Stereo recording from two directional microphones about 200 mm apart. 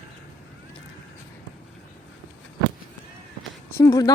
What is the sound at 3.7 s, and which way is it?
Speech, 15° left (ahead or behind).